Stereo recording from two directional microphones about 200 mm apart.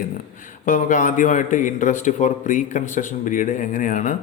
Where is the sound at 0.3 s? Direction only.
40° left (ahead or behind).